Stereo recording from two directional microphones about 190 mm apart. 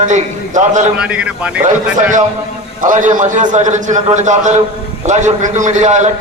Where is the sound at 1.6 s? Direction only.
40° right (ahead or behind).